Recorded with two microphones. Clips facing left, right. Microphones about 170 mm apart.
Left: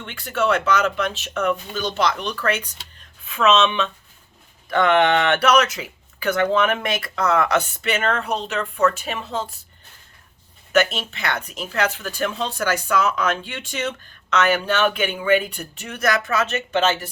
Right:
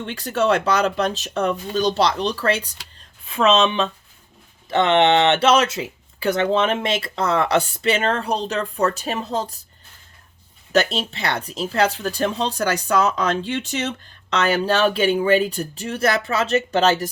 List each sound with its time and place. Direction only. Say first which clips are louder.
0.0 s speech: right 2 dB; 40° right (ahead or behind)
10.7 s speech: even; 35° right (ahead or behind)